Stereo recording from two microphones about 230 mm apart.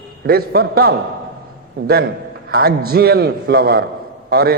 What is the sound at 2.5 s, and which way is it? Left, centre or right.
A man's voice, right.